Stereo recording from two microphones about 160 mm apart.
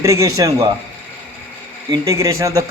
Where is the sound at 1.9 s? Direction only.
20° right (ahead or behind).